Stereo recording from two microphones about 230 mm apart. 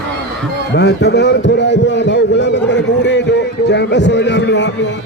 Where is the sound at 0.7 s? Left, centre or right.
Left.